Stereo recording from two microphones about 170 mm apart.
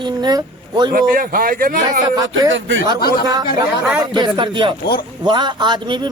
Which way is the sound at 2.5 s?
90° right.